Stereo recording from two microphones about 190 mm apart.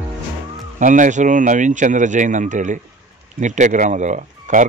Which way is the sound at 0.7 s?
40° right (ahead or behind).